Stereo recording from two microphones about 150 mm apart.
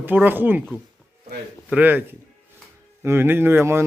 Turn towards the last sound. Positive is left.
turn(degrees=-15)  # may be behind; listen again after turning